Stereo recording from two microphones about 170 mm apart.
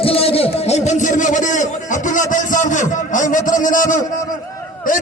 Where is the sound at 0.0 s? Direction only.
35° left (ahead or behind).